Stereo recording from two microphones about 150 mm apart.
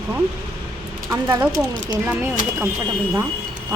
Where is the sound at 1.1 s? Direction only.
20° right (ahead or behind).